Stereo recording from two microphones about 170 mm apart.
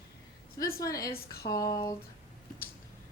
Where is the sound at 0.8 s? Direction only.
20° left (ahead or behind).